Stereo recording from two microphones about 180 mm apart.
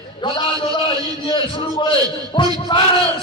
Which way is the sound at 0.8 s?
30° left (ahead or behind).